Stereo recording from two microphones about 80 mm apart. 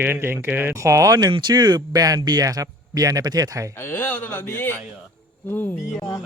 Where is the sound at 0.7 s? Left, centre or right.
Right.